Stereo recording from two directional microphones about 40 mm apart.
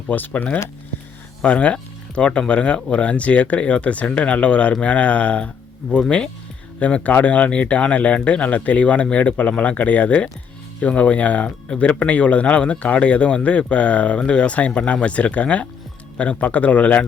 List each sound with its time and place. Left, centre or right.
0.1 s speech: left
1.5 s speech: left